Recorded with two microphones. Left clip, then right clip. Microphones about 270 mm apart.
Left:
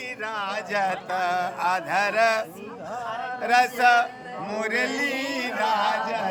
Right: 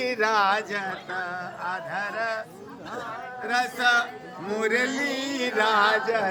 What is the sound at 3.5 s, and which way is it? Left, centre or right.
Speech, centre.